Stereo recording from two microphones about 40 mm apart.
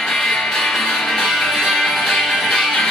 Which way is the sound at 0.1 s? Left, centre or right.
Centre.